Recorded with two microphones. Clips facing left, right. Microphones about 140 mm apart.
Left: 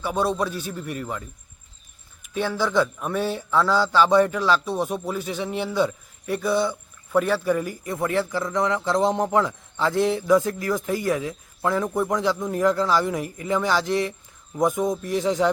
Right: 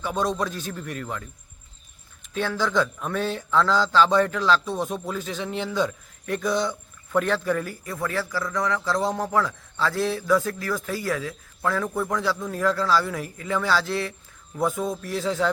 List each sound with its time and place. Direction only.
0.0 s a man's voice: 10° left (ahead or behind)
2.2 s a man's voice: 10° left (ahead or behind)